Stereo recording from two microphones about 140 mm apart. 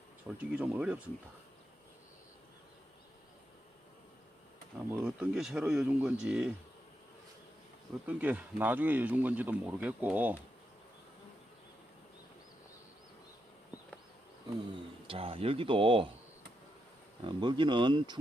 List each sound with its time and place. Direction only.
0.3 s speech: 10° right (ahead or behind)
4.9 s speech: 15° right (ahead or behind)
8.0 s speech: 10° right (ahead or behind)
15.0 s speech: 40° right (ahead or behind)
17.2 s speech: 35° right (ahead or behind)